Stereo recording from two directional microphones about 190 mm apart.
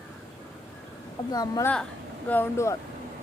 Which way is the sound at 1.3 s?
20° left (ahead or behind).